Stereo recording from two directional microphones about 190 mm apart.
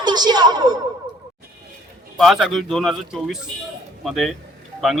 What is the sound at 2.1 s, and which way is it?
Speech, centre (ahead or behind).